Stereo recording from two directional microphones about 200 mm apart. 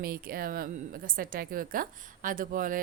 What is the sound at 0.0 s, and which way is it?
A woman's voice, 50° right (ahead or behind).